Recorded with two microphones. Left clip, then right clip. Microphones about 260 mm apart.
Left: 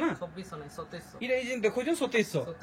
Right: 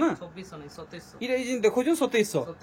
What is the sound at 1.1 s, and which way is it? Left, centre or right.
Speech, centre.